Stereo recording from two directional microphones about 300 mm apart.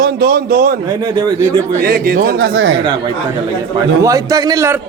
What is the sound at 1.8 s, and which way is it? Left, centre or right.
Speech, right.